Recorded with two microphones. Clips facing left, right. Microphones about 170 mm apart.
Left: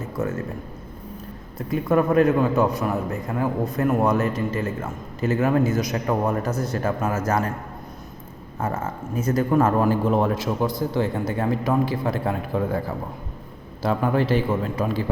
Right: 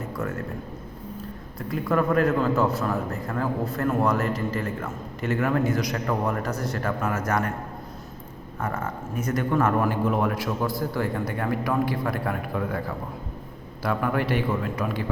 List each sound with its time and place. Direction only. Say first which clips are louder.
0.2 s a man's voice: left 5 dB; 20° left (ahead or behind)
1.5 s a man's voice: left 4 dB; 20° left (ahead or behind)
8.5 s a man's voice: left 3 dB; 25° left (ahead or behind)
13.8 s a man's voice: left 4 dB; 25° left (ahead or behind)